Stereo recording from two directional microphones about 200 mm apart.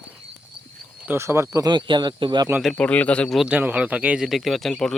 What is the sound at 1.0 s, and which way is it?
Speech, 10° right (ahead or behind).